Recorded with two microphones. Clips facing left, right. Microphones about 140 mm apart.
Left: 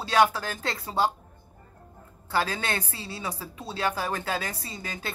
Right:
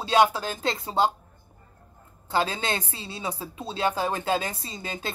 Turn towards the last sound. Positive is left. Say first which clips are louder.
# right 2 dB
turn(degrees=-25)  # may be behind; listen again after turning